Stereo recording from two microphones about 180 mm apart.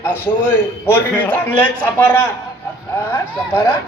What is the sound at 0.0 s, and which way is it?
A man's voice, 10° left (ahead or behind).